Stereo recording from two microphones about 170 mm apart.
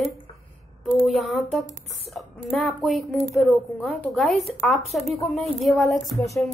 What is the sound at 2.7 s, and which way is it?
A woman's voice, centre (ahead or behind).